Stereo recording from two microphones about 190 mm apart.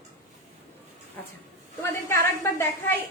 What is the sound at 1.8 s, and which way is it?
Speech, 15° left (ahead or behind).